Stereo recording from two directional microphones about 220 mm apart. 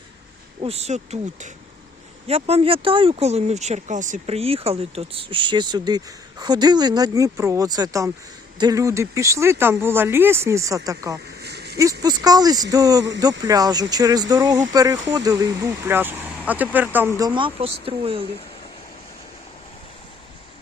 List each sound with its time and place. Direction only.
0.6 s speech: 30° right (ahead or behind)
11.3 s a sound: 45° right (ahead or behind)
11.8 s speech: 15° right (ahead or behind)